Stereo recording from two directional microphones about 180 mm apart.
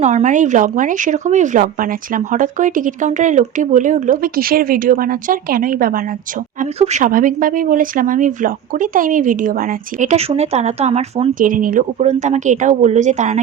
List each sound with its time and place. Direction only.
0.0 s speech: 40° right (ahead or behind)
6.6 s speech: 40° right (ahead or behind)
11.3 s speech: 50° right (ahead or behind)